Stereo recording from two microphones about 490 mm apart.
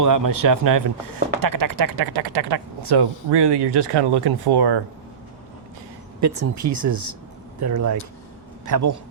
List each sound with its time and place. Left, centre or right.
0.0 s speech: right
6.1 s speech: right